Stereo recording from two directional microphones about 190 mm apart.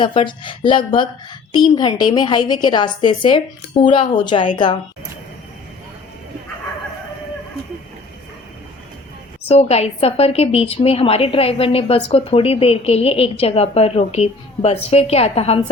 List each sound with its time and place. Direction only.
0.0 s a woman's voice: 25° left (ahead or behind)
9.5 s a woman's voice: 35° left (ahead or behind)